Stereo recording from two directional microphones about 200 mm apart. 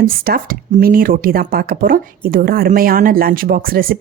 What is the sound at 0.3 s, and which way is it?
A woman's voice, 45° right (ahead or behind).